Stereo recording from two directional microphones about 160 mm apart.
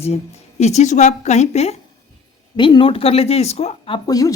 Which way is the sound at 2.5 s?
30° left (ahead or behind).